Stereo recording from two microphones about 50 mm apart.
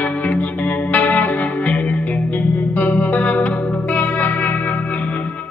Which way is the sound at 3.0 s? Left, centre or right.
Left.